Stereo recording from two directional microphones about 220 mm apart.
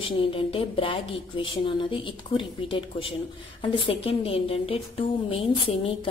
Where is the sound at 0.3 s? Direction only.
25° left (ahead or behind).